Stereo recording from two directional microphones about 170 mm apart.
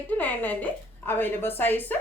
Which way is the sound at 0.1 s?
10° left (ahead or behind).